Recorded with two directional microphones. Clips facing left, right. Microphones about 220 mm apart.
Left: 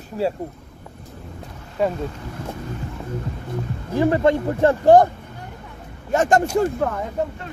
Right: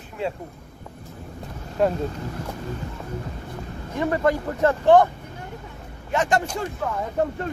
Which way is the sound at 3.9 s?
30° left (ahead or behind).